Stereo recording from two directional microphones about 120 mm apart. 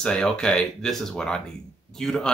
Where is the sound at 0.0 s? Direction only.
5° left (ahead or behind).